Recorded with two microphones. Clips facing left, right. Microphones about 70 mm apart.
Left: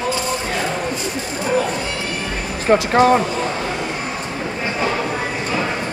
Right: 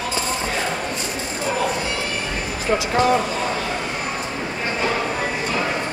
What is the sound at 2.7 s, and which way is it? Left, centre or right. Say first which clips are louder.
Speech: left 7 dB; left.